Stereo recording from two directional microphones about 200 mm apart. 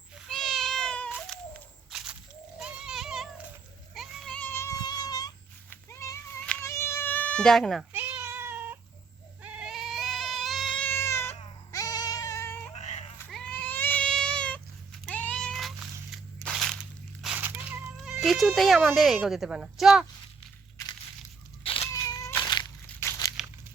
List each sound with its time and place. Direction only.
0.3 s cat: centre (ahead or behind)
1.9 s a sound: centre (ahead or behind); by 5.3 s 20° left (ahead or behind)
5.7 s cat: 15° left (ahead or behind)
7.9 s cat: 10° right (ahead or behind); by 11.3 s 15° left (ahead or behind)
11.7 s goat: 20° left (ahead or behind)
12.7 s sheep: 35° left (ahead or behind)
13.3 s cat: 5° left (ahead or behind)
16.1 s crushing: centre (ahead or behind)
17.2 s a sound: 10° right (ahead or behind)
17.9 s music: centre (ahead or behind)
18.9 s speech: centre (ahead or behind)
21.6 s cat: 25° left (ahead or behind)